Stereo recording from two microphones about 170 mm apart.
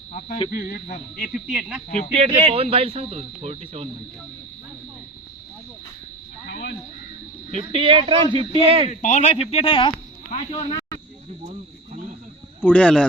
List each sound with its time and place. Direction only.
0.1 s speech: 40° left (ahead or behind)
0.5 s speech: 65° left (ahead or behind)
1.2 s speech: 5° right (ahead or behind)
2.1 s speech: 35° right (ahead or behind)
6.5 s cricket: 80° left
7.5 s speech: 35° right (ahead or behind)
8.9 s speech: 45° left (ahead or behind); by 10.9 s 25° left (ahead or behind)
12.6 s speech: 5° left (ahead or behind)